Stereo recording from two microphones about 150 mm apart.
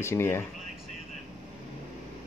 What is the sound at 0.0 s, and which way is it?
Speech, 15° left (ahead or behind).